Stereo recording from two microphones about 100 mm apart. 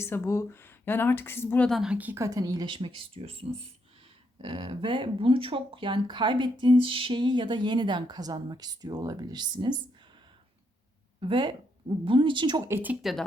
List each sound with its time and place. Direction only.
0.0 s a woman's voice: 25° left (ahead or behind)
1.8 s a woman's voice: 10° right (ahead or behind)
2.1 s speech: 35° right (ahead or behind); by 3.7 s 75° right (ahead or behind)
4.4 s speech: 60° right (ahead or behind)
11.2 s speech: 55° right (ahead or behind)
12.6 s speech: 20° right (ahead or behind)
13.0 s speech: centre (ahead or behind)